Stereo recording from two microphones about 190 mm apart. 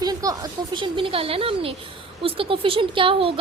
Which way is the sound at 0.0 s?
20° right (ahead or behind).